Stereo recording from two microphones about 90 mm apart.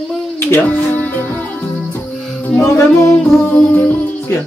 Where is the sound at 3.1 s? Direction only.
5° left (ahead or behind).